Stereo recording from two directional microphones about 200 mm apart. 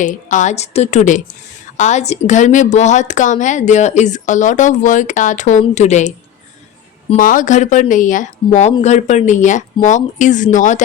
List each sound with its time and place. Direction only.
0.0 s a woman's voice: 40° left (ahead or behind)
7.2 s a woman's voice: 40° left (ahead or behind)